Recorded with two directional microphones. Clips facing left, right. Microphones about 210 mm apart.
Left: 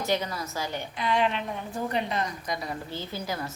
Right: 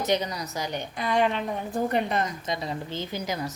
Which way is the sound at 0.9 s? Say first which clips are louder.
Right 2 dB; 45° right (ahead or behind).